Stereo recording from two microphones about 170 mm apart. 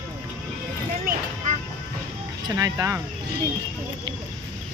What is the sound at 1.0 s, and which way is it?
Vehicle, 45° right (ahead or behind).